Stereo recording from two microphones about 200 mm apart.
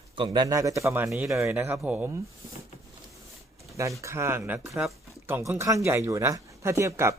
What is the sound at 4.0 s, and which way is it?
Speech, 15° right (ahead or behind).